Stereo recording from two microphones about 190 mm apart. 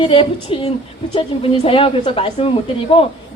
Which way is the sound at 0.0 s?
25° left (ahead or behind).